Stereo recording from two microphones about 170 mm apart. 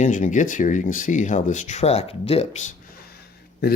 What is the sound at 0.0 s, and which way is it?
Speech, 45° left (ahead or behind).